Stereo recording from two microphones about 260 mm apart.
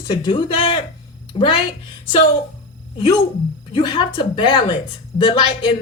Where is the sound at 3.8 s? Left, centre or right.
Centre.